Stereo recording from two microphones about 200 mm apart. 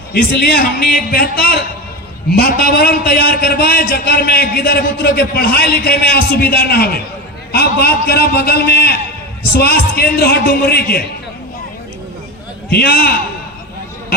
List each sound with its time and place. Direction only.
0.1 s a man's voice: 50° left (ahead or behind)
12.7 s a man's voice: 50° left (ahead or behind)